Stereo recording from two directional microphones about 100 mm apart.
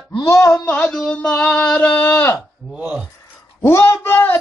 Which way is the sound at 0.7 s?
15° left (ahead or behind).